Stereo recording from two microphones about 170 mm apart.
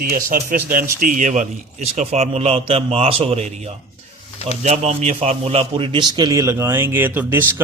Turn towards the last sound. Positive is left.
turn(degrees=-10)  # may be behind; listen again after turning